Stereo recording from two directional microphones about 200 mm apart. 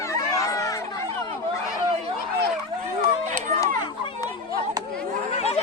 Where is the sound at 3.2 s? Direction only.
35° right (ahead or behind).